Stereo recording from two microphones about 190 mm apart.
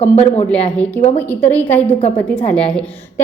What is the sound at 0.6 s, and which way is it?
A woman's voice, 5° left (ahead or behind).